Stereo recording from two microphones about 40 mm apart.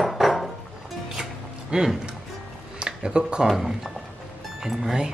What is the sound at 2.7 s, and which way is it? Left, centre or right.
Music, right.